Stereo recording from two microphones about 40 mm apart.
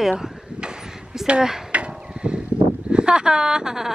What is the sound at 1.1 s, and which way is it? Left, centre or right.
Speech, centre.